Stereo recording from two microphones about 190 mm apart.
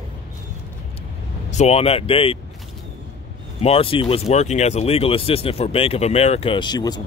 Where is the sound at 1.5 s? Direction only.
35° left (ahead or behind).